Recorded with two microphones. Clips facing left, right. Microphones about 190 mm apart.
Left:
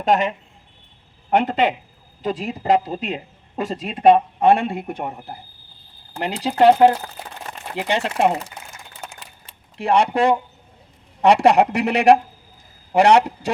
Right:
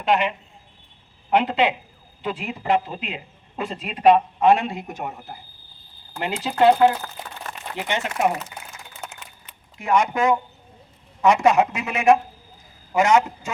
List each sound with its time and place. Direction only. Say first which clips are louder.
0.0 s speech: left 2 dB; 45° left (ahead or behind)
4.4 s speech: left 2 dB; 55° left (ahead or behind)
4.9 s speech: left 3 dB; 35° left (ahead or behind)
9.2 s a sound: left 1 dB; 30° left (ahead or behind)
11.2 s speech: left 3 dB; 35° left (ahead or behind)